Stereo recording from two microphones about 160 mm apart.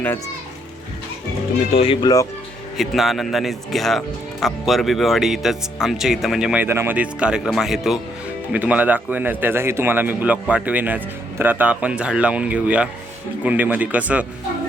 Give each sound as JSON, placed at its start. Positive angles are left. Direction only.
{"t": 1.7, "sound": "speech", "side_deg": 35}
{"t": 2.7, "sound": "a man's voice", "side_deg": 0}